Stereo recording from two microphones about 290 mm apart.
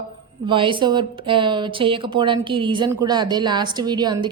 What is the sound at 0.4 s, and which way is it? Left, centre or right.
A woman's voice, centre.